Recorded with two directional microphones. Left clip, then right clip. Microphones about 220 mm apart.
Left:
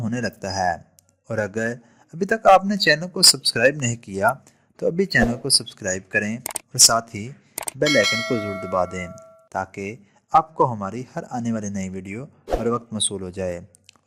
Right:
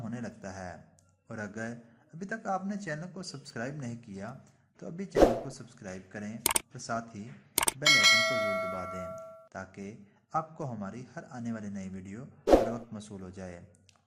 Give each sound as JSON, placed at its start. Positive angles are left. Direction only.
{"t": 0.0, "sound": "a man's voice", "side_deg": 40}
{"t": 7.9, "sound": "speech", "side_deg": 0}
{"t": 8.7, "sound": "a man's voice", "side_deg": 45}